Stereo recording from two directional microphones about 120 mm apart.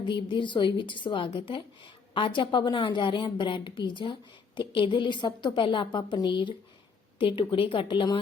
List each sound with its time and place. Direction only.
0.0 s a woman's voice: 40° left (ahead or behind)